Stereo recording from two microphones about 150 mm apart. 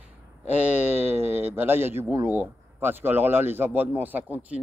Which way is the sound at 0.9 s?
45° left (ahead or behind).